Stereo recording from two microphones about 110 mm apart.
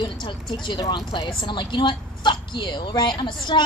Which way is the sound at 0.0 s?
45° left (ahead or behind).